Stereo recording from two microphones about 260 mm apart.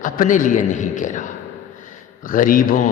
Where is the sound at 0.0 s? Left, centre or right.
Left.